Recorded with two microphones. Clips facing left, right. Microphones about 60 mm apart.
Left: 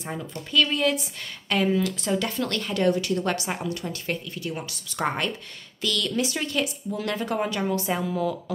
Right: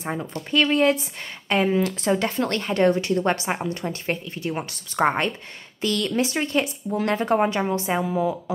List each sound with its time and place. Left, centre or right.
0.0 s speech: right